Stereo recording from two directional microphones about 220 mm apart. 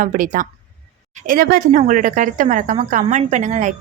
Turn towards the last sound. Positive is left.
turn(degrees=-35)  # may be behind; listen again after turning